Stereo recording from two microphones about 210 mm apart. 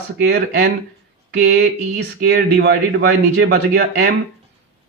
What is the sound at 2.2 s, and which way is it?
Speech, 55° right (ahead or behind).